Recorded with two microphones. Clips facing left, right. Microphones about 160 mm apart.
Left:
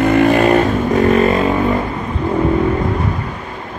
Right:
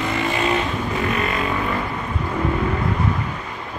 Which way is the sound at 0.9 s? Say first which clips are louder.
Left 13 dB; 40° left (ahead or behind).